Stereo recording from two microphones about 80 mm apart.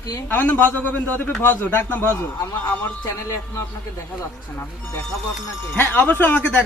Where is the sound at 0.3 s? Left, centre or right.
Left.